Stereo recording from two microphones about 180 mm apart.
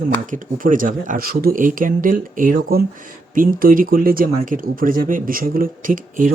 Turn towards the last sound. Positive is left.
turn(degrees=-50)  # may be behind; listen again after turning